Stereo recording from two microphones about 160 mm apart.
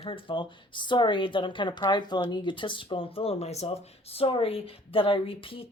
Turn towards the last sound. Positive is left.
turn(degrees=35)  # may be behind; listen again after turning